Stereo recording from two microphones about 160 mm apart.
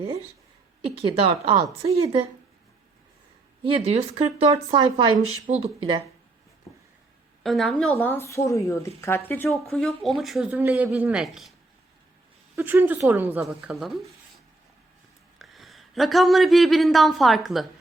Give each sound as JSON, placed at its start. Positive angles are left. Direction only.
{"t": 0.9, "sound": "speech", "side_deg": -35}
{"t": 3.6, "sound": "speech", "side_deg": -35}
{"t": 5.5, "sound": "speech", "side_deg": -45}
{"t": 7.4, "sound": "a woman's voice", "side_deg": 0}
{"t": 9.5, "sound": "speech", "side_deg": 0}
{"t": 12.5, "sound": "speech", "side_deg": -10}
{"t": 13.5, "sound": "speech", "side_deg": 0}
{"t": 15.4, "sound": "speech", "side_deg": 0}